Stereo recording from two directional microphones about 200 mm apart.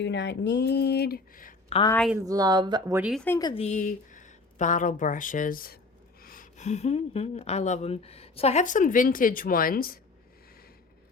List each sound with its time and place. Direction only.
0.0 s speech: 60° left (ahead or behind); by 1.5 s 45° left (ahead or behind)
2.2 s speech: 20° right (ahead or behind)
3.0 s speech: centre (ahead or behind)
3.2 s a woman's voice: 15° left (ahead or behind)
3.5 s speech: 35° left (ahead or behind)